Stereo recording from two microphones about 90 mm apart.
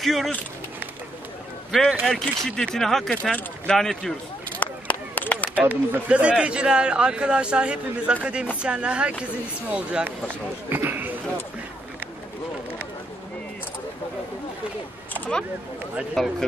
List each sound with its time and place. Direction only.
0.0 s speech: centre (ahead or behind)
1.7 s speech: centre (ahead or behind)
3.3 s speech: 15° left (ahead or behind)
3.7 s speech: 5° left (ahead or behind)
4.6 s a sound: 20° left (ahead or behind)
5.7 s speech: 15° right (ahead or behind)